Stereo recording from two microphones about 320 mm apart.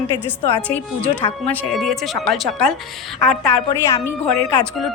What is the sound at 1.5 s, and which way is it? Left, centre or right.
A woman's voice, centre.